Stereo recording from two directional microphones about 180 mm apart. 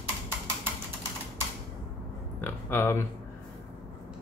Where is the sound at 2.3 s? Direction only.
10° left (ahead or behind).